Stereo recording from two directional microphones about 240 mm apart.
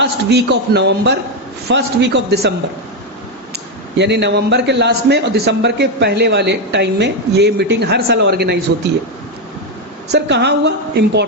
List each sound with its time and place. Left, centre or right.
0.0 s a man's voice: right
3.9 s a man's voice: right
10.1 s a man's voice: right